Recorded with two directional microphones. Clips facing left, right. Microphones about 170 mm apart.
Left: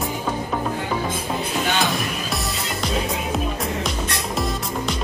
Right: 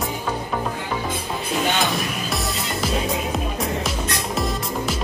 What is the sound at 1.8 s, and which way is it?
Music, centre (ahead or behind).